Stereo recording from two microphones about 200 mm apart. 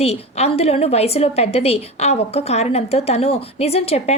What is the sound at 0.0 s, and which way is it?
A woman's voice, 30° left (ahead or behind).